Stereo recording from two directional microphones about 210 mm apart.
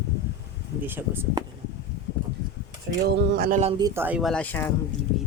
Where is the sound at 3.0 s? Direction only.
50° right (ahead or behind).